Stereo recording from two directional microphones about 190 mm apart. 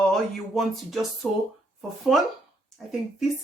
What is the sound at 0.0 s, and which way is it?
Speech, centre (ahead or behind).